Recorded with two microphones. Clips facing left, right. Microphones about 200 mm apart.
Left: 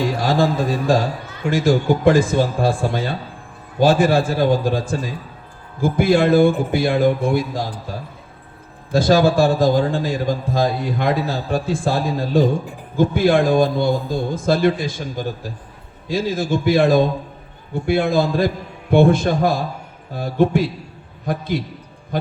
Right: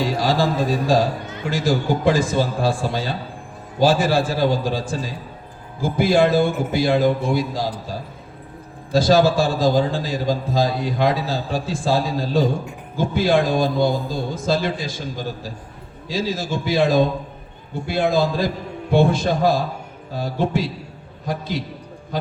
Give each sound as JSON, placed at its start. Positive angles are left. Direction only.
{"t": 0.2, "sound": "a man's voice", "side_deg": 55}
{"t": 1.5, "sound": "a man's voice", "side_deg": 55}
{"t": 8.9, "sound": "a man's voice", "side_deg": 55}
{"t": 16.0, "sound": "a man's voice", "side_deg": 55}